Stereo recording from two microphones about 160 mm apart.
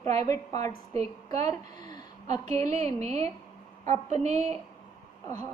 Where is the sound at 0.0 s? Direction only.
45° right (ahead or behind).